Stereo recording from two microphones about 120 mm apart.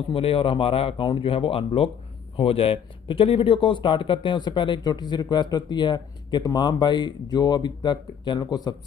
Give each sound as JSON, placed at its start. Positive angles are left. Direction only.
{"t": 0.1, "sound": "speech", "side_deg": 50}